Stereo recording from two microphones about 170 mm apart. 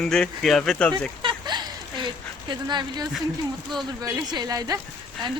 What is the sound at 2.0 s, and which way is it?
Speech, 25° right (ahead or behind).